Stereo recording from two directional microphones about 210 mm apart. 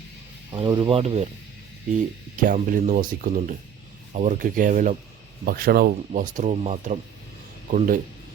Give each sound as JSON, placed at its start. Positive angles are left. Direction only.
{"t": 0.5, "sound": "speech", "side_deg": -20}
{"t": 2.4, "sound": "speech", "side_deg": -40}